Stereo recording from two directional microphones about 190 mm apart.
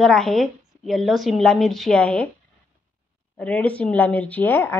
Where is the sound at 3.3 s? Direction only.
5° left (ahead or behind).